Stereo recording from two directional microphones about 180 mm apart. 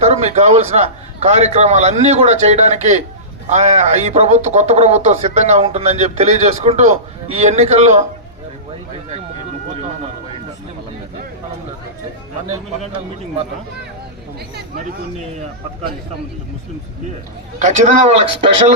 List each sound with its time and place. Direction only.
0.0 s speech: 40° right (ahead or behind)
17.6 s speech: 40° right (ahead or behind)